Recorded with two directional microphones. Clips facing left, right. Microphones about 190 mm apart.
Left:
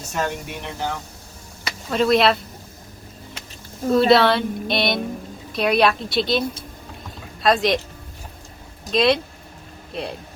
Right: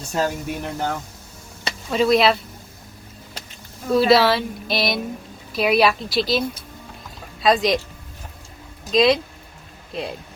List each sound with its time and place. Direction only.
0.1 s speech: 35° right (ahead or behind)
1.9 s speech: centre (ahead or behind)
3.9 s speech: centre (ahead or behind)
7.4 s speech: centre (ahead or behind)
8.9 s speech: centre (ahead or behind)